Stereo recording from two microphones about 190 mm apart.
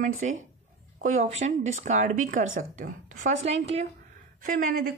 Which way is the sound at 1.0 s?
40° right (ahead or behind).